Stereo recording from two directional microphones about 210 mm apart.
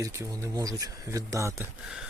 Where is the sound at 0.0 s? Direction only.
15° right (ahead or behind).